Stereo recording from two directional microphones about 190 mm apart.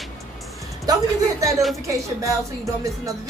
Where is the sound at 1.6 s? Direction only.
Centre (ahead or behind).